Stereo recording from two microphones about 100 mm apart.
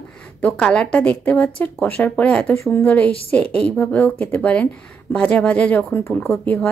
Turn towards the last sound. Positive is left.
turn(degrees=15)  # may be behind; listen again after turning